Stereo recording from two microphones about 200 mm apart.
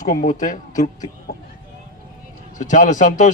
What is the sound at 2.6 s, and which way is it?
Speech, 40° left (ahead or behind).